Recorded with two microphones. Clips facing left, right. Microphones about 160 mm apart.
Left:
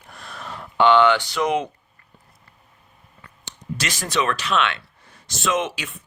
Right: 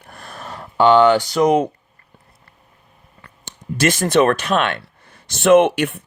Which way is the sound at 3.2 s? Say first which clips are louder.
Right 2 dB; 55° right (ahead or behind).